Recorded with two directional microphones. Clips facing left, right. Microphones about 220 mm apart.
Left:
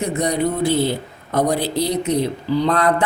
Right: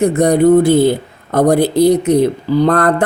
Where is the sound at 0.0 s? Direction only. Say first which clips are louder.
Right 9 dB; 50° right (ahead or behind).